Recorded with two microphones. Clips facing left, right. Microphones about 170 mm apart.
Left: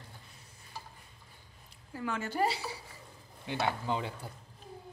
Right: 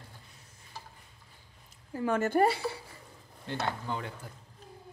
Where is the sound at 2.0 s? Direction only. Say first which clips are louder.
Right 6 dB; 50° right (ahead or behind).